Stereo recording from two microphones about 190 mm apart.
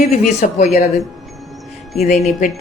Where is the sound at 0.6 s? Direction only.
35° left (ahead or behind).